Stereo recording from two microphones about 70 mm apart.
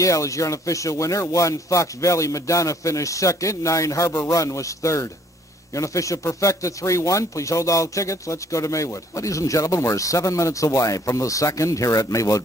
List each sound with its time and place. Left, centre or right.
0.0 s speech: left